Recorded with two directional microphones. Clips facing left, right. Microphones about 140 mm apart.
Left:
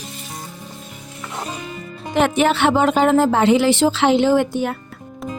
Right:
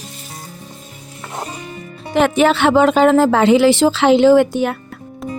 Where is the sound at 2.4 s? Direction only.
90° right.